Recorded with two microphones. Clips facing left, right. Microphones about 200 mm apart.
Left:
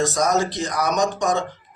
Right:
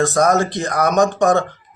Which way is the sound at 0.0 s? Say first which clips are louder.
Right 5 dB; 55° right (ahead or behind).